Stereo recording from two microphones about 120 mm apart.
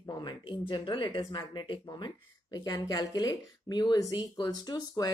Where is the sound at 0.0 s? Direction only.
35° left (ahead or behind).